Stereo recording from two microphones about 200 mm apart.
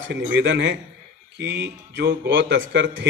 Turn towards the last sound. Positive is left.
turn(degrees=-65)  # may be behind; listen again after turning